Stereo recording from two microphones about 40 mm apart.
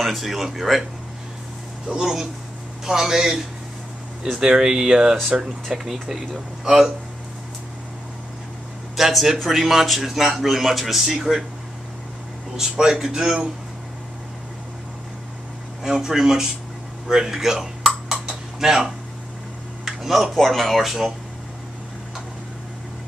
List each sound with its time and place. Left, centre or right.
0.0 s speech: centre
2.0 s speech: centre
8.9 s speech: centre
12.5 s speech: centre
15.8 s speech: centre
18.2 s typing: centre
19.9 s speech: centre